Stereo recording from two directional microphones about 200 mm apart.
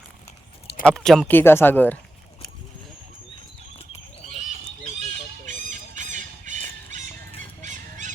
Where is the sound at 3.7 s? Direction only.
30° left (ahead or behind).